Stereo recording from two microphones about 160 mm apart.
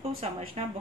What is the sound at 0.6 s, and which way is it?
Speech, 40° right (ahead or behind).